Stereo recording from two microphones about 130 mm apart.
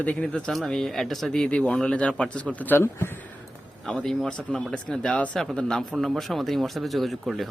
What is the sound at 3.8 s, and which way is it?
A man's voice, 5° left (ahead or behind).